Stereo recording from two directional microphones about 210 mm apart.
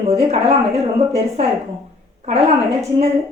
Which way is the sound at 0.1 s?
30° right (ahead or behind).